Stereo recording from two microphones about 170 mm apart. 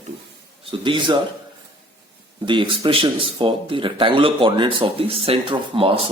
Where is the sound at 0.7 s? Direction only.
30° right (ahead or behind).